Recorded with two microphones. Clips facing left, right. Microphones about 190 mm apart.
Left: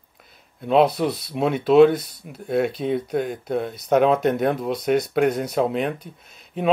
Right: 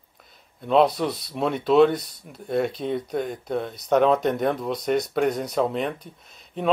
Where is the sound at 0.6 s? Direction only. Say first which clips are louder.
Left 2 dB; 5° left (ahead or behind).